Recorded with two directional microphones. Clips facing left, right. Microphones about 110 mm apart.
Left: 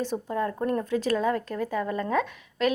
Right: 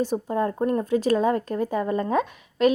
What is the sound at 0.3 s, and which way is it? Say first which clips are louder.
Speech: right 4 dB; 25° right (ahead or behind).